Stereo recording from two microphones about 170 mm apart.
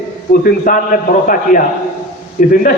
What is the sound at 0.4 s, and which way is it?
A man's voice, 50° left (ahead or behind).